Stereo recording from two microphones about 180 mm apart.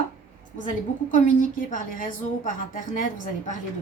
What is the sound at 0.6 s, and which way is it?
A woman's voice, 45° left (ahead or behind).